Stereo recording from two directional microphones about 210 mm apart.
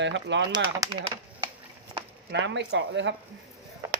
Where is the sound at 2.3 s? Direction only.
55° right (ahead or behind).